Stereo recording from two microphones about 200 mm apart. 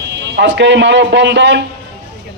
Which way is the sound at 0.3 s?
65° right (ahead or behind).